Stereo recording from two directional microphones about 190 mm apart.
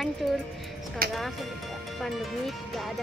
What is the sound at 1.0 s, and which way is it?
Speech, 50° right (ahead or behind).